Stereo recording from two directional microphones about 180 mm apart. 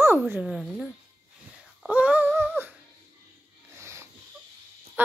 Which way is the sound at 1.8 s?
10° right (ahead or behind).